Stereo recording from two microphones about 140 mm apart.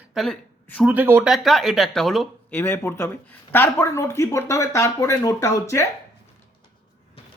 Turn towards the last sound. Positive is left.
turn(degrees=20)  # may be behind; listen again after turning